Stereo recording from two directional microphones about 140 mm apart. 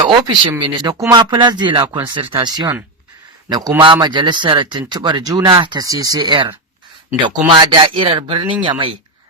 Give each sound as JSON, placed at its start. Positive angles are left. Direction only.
{"t": 0.0, "sound": "speech", "side_deg": -35}
{"t": 4.0, "sound": "speech", "side_deg": -35}